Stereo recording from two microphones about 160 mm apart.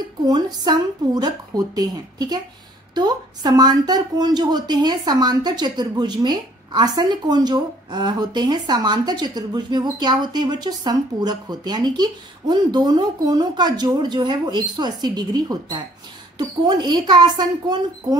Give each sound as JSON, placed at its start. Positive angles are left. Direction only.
{"t": 0.2, "sound": "speech", "side_deg": -25}